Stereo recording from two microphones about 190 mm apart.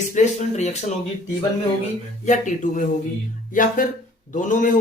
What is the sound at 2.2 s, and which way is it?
A man's voice, 40° left (ahead or behind).